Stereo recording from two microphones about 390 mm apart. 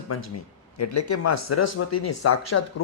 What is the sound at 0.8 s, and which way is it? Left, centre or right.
Speech, left.